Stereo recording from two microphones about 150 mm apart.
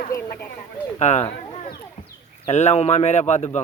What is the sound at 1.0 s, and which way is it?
Speech, 50° left (ahead or behind).